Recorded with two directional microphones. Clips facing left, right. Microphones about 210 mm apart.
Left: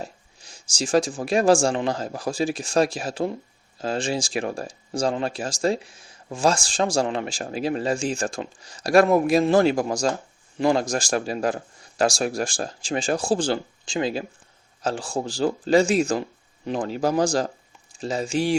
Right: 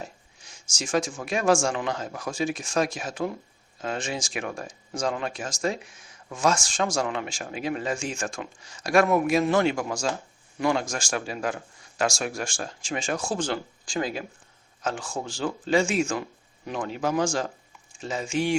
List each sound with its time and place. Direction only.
0.0 s speech: 35° left (ahead or behind)